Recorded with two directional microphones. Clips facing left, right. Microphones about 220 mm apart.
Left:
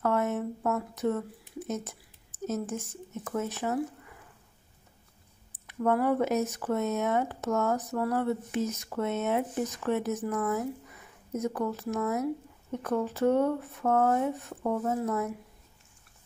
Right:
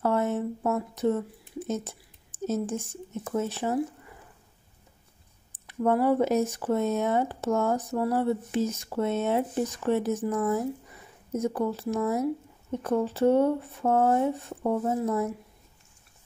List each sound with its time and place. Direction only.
0.0 s a sound: 30° right (ahead or behind)
1.7 s speech: 30° right (ahead or behind)
5.5 s speech: 30° right (ahead or behind)